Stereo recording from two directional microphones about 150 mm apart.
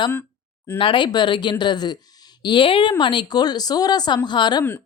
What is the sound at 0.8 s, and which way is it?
Speech, 35° left (ahead or behind).